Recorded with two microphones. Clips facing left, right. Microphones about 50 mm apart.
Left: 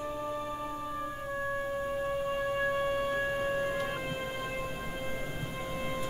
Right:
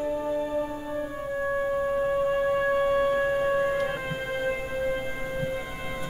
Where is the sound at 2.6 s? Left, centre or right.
Right.